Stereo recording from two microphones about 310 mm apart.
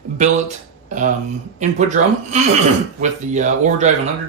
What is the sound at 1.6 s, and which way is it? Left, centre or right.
Speech, right.